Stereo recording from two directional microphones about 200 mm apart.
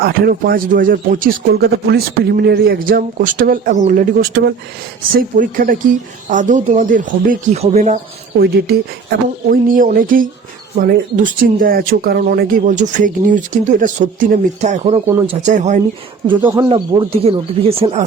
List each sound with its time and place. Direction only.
0.0 s speech: 50° right (ahead or behind)
8.4 s speech: 50° right (ahead or behind)
16.2 s speech: 25° right (ahead or behind)